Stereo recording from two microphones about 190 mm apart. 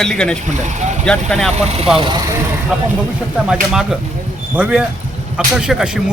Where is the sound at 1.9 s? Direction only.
25° right (ahead or behind).